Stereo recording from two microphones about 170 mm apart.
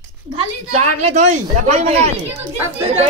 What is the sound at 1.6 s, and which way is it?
Speech, 40° right (ahead or behind).